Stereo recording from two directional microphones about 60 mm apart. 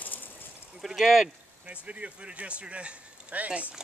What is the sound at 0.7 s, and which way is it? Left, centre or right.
Speech, centre.